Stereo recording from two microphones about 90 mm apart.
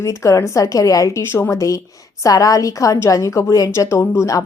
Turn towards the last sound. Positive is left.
turn(degrees=35)  # may be behind; listen again after turning